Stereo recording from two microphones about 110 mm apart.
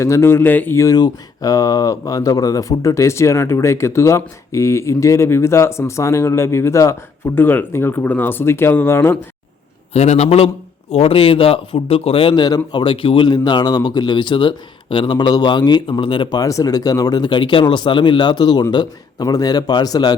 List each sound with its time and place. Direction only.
0.0 s speech: 25° left (ahead or behind)
9.9 s a man's voice: 80° left; by 20.1 s 35° left (ahead or behind)